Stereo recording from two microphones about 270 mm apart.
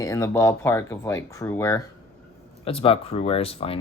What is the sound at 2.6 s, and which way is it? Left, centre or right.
Speech, left.